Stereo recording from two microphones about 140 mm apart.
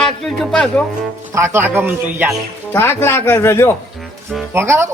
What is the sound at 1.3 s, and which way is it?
Speech, 15° right (ahead or behind).